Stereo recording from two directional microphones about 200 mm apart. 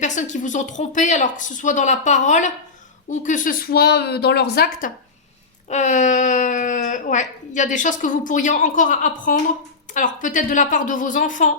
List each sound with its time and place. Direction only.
0.0 s a woman's voice: 35° left (ahead or behind)
5.6 s a woman's voice: 35° left (ahead or behind)